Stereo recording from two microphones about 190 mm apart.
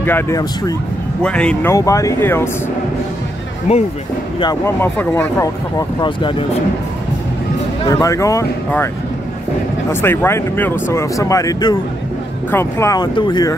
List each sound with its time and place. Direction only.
0.0 s speech: 15° left (ahead or behind)
1.2 s speech: 5° left (ahead or behind)
3.7 s speech: 35° left (ahead or behind)
4.4 s speech: 15° left (ahead or behind)
7.9 s speech: 15° left (ahead or behind)
9.8 s speech: 10° left (ahead or behind)